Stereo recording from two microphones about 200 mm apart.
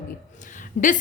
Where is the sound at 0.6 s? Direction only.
40° left (ahead or behind).